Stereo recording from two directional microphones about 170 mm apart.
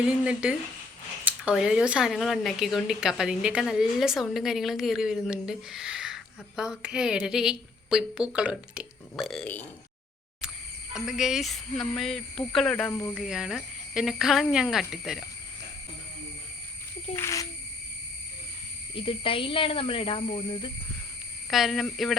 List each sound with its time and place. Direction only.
0.0 s speech: 5° right (ahead or behind)
10.9 s speech: 5° right (ahead or behind)
12.9 s speech: 20° left (ahead or behind)
13.1 s speech: centre (ahead or behind)
17.2 s speech: 15° left (ahead or behind)
18.9 s speech: 30° left (ahead or behind)
21.5 s speech: centre (ahead or behind)